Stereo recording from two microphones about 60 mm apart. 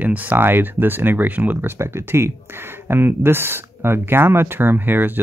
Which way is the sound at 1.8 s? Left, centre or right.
Right.